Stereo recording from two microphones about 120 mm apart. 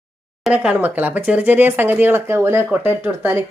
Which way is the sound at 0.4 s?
10° right (ahead or behind).